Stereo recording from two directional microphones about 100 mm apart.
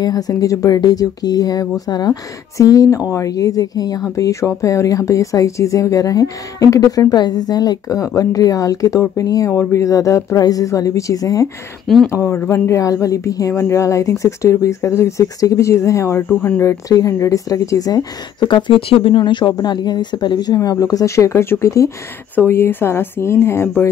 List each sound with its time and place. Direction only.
0.0 s a woman's voice: 40° left (ahead or behind); by 16.6 s 20° left (ahead or behind)
16.6 s a woman's voice: 30° left (ahead or behind)
22.3 s speech: 20° left (ahead or behind)